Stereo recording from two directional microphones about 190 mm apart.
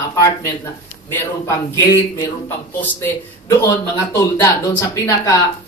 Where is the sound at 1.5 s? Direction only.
15° left (ahead or behind).